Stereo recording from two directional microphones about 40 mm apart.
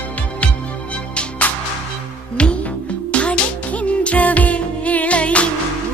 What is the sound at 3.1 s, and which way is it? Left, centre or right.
Music, left.